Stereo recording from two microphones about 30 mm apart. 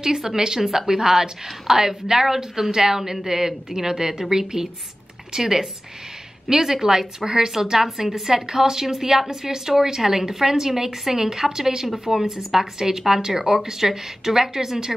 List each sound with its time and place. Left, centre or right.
0.0 s a woman's voice: centre